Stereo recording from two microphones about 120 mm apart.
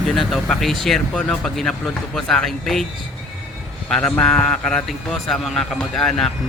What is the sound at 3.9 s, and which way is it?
Speech, 5° left (ahead or behind).